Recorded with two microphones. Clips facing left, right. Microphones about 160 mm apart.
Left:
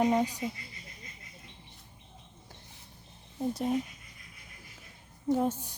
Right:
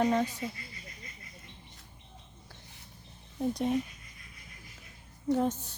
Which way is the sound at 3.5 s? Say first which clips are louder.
Even; 5° left (ahead or behind).